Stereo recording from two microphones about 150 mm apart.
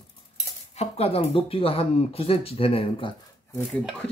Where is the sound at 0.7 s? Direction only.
45° left (ahead or behind).